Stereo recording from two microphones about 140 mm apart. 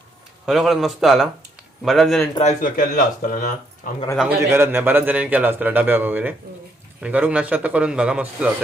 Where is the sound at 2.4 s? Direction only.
75° left (ahead or behind).